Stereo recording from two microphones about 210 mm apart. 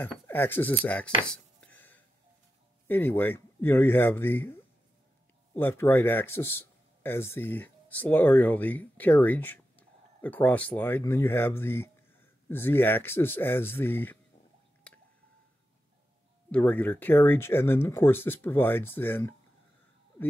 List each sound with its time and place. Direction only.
0.0 s speech: 10° left (ahead or behind)
1.2 s a sound: 5° left (ahead or behind)
2.9 s a man's voice: 10° left (ahead or behind)
16.5 s speech: 5° left (ahead or behind)